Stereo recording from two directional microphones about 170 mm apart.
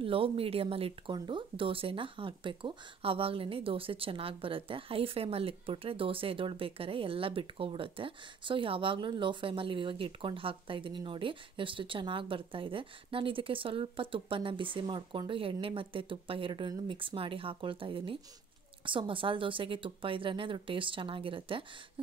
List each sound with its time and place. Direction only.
0.0 s speech: 35° right (ahead or behind)